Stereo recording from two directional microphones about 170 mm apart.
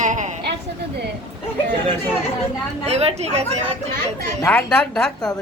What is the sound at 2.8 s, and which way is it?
Speech, 40° right (ahead or behind).